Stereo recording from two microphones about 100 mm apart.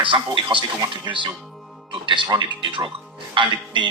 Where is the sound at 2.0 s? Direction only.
55° right (ahead or behind).